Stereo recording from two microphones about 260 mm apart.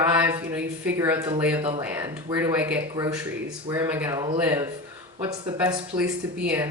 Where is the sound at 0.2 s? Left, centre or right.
Centre.